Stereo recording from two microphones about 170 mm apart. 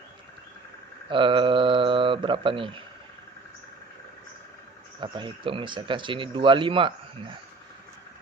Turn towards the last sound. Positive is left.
turn(degrees=-30)  # may be behind; listen again after turning